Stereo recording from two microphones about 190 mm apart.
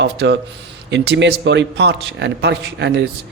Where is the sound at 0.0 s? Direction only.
70° right (ahead or behind).